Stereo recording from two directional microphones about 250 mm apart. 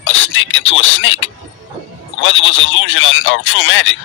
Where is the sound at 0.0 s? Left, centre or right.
Left.